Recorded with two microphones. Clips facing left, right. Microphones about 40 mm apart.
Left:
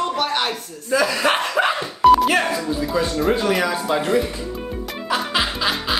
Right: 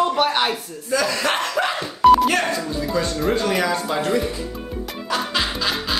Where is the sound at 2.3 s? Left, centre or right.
Centre.